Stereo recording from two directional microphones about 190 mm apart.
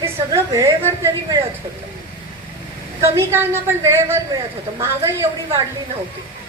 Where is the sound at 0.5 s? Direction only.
15° right (ahead or behind).